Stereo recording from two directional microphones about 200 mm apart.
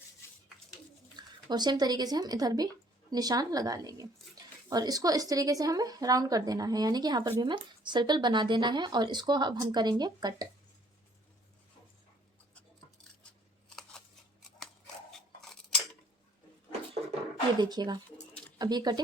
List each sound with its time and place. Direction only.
1.5 s speech: 20° right (ahead or behind)
15.1 s a sound: centre (ahead or behind)
17.6 s speech: 20° right (ahead or behind)